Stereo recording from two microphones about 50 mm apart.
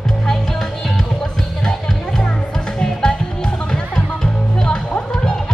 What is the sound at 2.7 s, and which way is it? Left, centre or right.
Music, centre.